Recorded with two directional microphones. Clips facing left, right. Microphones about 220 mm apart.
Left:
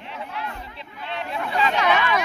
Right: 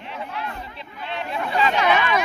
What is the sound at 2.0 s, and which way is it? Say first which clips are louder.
Chatter: right 1 dB; 20° right (ahead or behind).